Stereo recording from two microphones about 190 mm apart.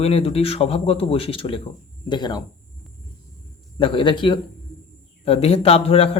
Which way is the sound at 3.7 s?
25° left (ahead or behind).